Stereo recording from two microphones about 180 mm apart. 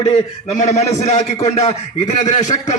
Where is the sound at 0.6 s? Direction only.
40° left (ahead or behind).